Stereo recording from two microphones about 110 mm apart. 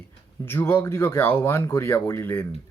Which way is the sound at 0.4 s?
20° left (ahead or behind).